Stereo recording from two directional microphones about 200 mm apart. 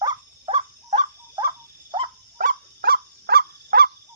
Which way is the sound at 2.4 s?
45° right (ahead or behind).